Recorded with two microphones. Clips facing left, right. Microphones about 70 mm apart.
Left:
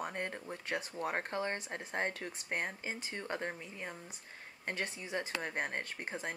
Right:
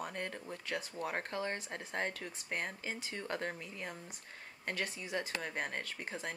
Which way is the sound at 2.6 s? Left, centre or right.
Centre.